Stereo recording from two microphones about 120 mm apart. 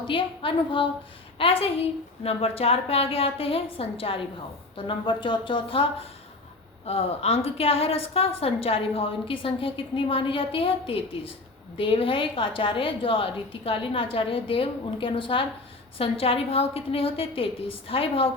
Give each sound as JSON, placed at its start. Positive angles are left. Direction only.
{"t": 0.1, "sound": "a woman's voice", "side_deg": 45}